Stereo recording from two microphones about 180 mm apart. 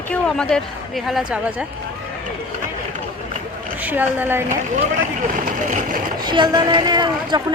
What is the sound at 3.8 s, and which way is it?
Speech, 10° right (ahead or behind).